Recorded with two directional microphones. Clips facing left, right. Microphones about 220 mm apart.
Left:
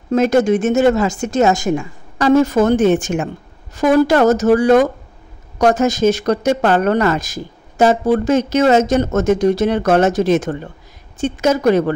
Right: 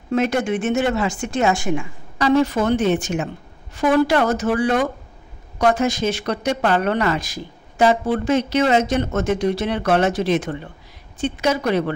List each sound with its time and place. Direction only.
0.1 s speech: 40° left (ahead or behind)